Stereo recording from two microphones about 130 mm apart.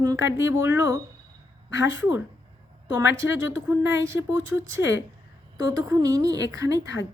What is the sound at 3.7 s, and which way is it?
Speech, 20° right (ahead or behind).